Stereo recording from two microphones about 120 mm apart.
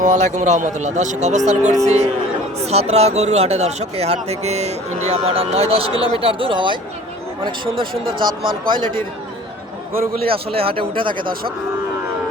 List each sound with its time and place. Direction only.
0.0 s a man's voice: 85° right; by 9.0 s 40° right (ahead or behind)
10.2 s a man's voice: 50° right (ahead or behind)